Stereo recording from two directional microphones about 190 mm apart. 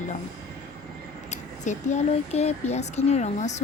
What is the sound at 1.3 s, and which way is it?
Speech, 40° left (ahead or behind).